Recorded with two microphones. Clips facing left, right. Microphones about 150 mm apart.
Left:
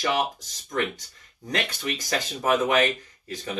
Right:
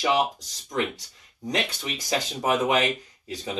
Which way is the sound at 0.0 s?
15° right (ahead or behind).